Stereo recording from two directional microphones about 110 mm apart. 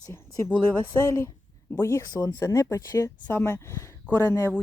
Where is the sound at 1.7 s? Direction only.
25° left (ahead or behind).